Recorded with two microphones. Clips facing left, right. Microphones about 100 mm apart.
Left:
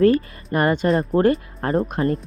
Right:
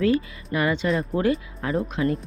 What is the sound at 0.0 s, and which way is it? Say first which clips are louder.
Speech: left 5 dB; 45° left (ahead or behind).